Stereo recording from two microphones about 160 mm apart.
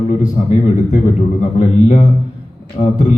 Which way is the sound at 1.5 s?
45° left (ahead or behind).